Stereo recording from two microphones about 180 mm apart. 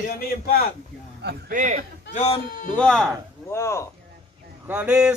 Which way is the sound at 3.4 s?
15° left (ahead or behind).